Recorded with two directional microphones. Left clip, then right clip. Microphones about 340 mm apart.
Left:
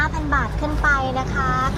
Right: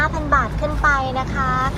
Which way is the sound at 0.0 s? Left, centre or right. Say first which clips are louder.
Right 3 dB; centre.